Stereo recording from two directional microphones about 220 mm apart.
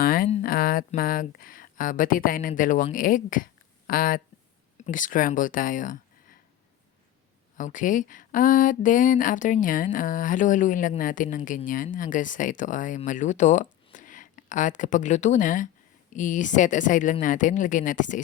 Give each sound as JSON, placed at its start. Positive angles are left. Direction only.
{"t": 0.0, "sound": "a sound", "side_deg": 40}
{"t": 0.4, "sound": "speech", "side_deg": 40}
{"t": 7.5, "sound": "speech", "side_deg": 35}